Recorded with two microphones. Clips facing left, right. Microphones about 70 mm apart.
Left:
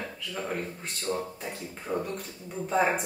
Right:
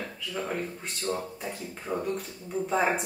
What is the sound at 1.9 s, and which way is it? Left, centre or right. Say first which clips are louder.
Speech: left 1 dB; centre.